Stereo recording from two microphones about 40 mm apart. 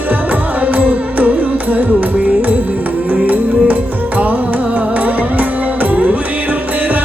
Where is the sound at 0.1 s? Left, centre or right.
Right.